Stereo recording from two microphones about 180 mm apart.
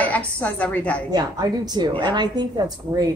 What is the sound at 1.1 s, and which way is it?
A woman's voice, 20° right (ahead or behind).